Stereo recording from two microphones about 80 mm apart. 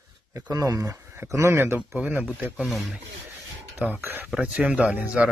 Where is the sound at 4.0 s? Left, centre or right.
Right.